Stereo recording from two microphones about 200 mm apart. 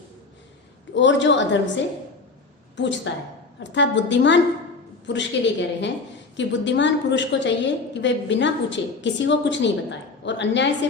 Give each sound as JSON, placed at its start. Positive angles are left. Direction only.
{"t": 0.9, "sound": "a woman's voice", "side_deg": 65}